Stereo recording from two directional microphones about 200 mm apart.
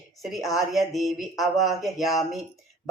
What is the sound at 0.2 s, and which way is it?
Speech, centre (ahead or behind).